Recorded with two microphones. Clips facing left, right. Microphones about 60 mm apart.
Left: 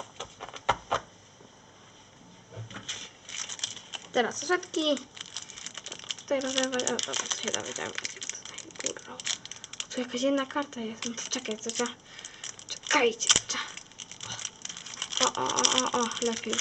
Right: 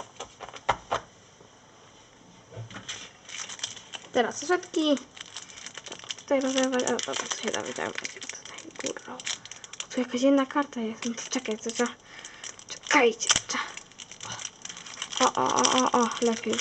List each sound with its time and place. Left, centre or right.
0.0 s a sound: centre
2.7 s crumpling: centre
6.4 s speech: centre
9.9 s speech: right
11.3 s speech: centre
12.6 s a sound: centre
13.7 s crumpling: centre
15.4 s rattle: centre
15.9 s speech: centre